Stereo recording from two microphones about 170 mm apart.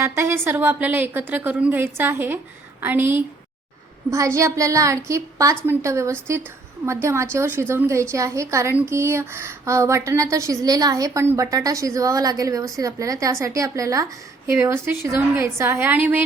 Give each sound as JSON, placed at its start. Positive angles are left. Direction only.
{"t": 0.0, "sound": "a woman's voice", "side_deg": -15}